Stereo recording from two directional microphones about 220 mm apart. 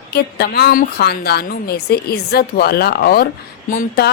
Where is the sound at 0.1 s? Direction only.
45° left (ahead or behind).